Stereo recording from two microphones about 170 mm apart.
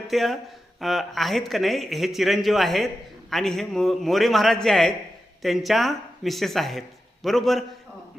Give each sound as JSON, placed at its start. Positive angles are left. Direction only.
{"t": 0.1, "sound": "speech", "side_deg": 0}